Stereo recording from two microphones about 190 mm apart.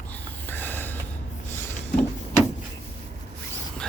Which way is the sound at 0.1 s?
10° left (ahead or behind).